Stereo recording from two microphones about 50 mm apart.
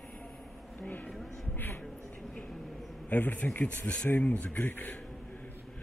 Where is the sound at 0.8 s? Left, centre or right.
Left.